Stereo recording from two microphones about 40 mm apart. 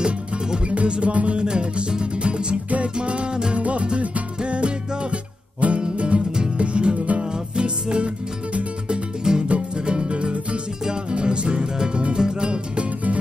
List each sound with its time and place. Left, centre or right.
0.0 s music: right